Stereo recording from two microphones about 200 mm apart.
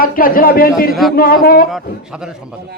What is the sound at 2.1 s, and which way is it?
Speech, 5° right (ahead or behind).